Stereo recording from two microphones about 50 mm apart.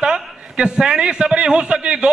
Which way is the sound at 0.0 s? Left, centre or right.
Centre.